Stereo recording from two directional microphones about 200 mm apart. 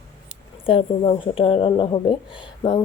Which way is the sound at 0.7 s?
30° left (ahead or behind).